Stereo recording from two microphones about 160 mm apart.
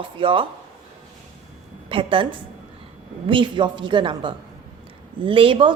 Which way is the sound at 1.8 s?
35° right (ahead or behind).